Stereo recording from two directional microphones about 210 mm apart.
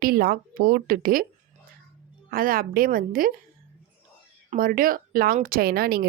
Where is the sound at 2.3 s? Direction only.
45° right (ahead or behind).